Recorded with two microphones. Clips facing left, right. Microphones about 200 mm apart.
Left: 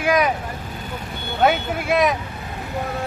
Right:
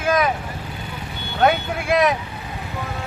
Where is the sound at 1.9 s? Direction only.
Centre (ahead or behind).